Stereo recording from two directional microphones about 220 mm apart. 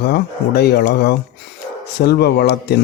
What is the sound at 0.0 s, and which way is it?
Speech, 50° left (ahead or behind).